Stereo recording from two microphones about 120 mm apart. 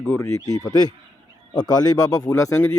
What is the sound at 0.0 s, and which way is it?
Speech, 20° left (ahead or behind).